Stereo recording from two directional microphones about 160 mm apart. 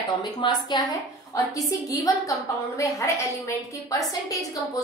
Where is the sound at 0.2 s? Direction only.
25° left (ahead or behind).